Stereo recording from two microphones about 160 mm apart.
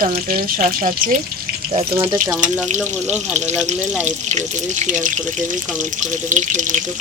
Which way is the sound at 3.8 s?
10° right (ahead or behind).